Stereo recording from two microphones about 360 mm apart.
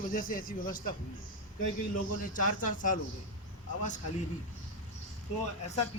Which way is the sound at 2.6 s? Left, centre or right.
Left.